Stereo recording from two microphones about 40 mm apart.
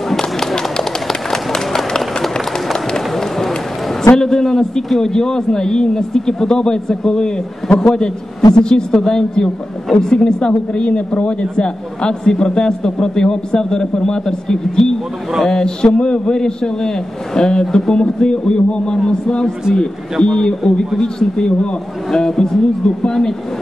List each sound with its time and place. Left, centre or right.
0.1 s a sound: centre
1.0 s run: centre
4.2 s a man's voice: centre